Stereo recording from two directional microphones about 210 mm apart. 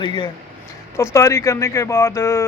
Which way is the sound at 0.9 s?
15° left (ahead or behind).